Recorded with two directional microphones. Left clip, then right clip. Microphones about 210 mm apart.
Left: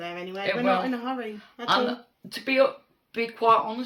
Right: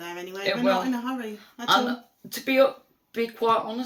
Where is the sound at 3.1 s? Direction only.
20° left (ahead or behind).